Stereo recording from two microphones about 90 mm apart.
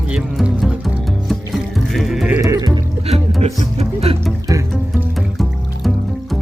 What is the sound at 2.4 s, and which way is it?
Music, 40° right (ahead or behind).